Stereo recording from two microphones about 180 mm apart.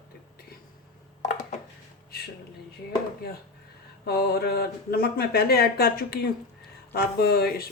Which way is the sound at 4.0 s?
60° left (ahead or behind).